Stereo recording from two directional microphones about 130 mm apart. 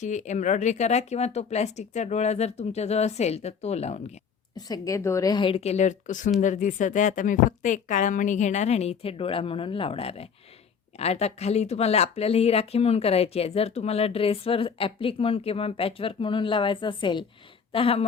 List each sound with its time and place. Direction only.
0.0 s speech: 70° left (ahead or behind)
4.5 s a woman's voice: 30° left (ahead or behind)
5.5 s a woman's voice: 55° left (ahead or behind)